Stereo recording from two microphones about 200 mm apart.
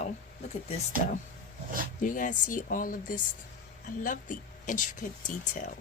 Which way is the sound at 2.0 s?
40° left (ahead or behind).